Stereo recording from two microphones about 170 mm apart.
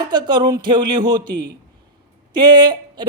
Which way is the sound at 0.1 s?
25° right (ahead or behind).